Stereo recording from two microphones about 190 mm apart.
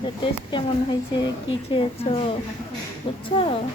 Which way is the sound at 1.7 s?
30° left (ahead or behind).